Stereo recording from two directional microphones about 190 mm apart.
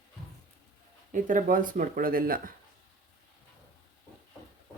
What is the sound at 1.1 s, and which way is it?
Speech, 45° right (ahead or behind).